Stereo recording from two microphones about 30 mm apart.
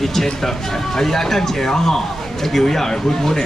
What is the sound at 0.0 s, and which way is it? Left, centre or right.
Speech, centre.